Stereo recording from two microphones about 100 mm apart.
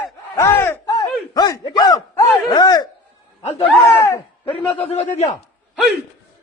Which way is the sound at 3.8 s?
30° left (ahead or behind).